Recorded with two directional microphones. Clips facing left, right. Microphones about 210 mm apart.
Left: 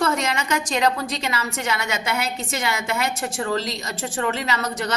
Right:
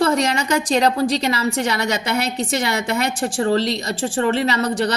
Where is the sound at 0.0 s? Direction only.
35° right (ahead or behind).